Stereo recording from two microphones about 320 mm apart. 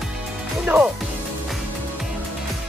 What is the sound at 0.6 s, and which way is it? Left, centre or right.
Speech, centre.